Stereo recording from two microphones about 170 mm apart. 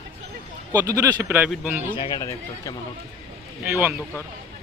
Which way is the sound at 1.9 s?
25° left (ahead or behind).